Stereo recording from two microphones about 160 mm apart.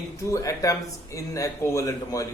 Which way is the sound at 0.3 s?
20° left (ahead or behind).